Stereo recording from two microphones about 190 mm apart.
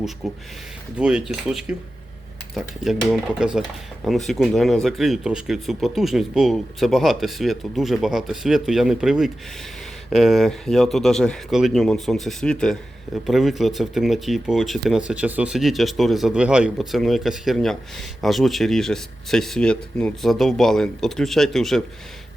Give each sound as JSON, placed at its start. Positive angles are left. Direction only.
{"t": 0.9, "sound": "speech", "side_deg": -5}